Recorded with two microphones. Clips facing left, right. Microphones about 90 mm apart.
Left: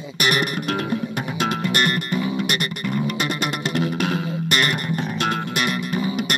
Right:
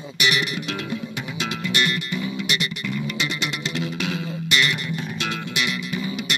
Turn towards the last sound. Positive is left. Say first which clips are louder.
# left 4 dB
turn(degrees=45)  # may be behind; listen again after turning